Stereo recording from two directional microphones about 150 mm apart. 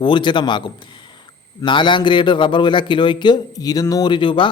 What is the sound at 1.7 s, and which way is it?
A man's voice, 30° left (ahead or behind).